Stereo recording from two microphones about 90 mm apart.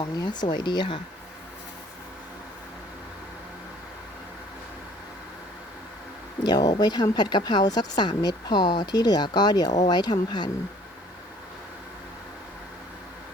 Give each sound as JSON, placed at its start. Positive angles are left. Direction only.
{"t": 0.0, "sound": "speech", "side_deg": 50}
{"t": 6.4, "sound": "speech", "side_deg": 45}